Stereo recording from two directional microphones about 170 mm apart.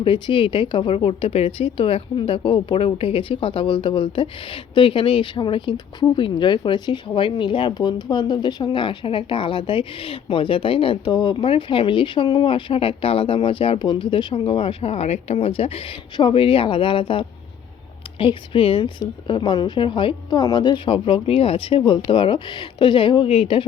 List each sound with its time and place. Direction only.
0.0 s a woman's voice: 30° left (ahead or behind)